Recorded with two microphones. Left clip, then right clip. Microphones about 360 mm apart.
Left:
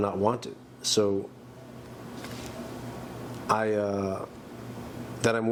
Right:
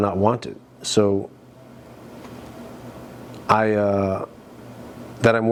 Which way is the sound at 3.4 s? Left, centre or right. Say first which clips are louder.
Right 8 dB; right.